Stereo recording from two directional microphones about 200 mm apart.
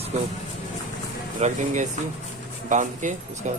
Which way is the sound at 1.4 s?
40° right (ahead or behind).